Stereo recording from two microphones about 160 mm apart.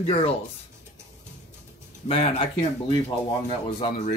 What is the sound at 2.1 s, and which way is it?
Speech, 35° left (ahead or behind).